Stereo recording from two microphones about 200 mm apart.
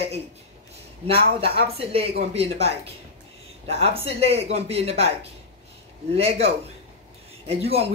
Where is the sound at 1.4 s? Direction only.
30° right (ahead or behind).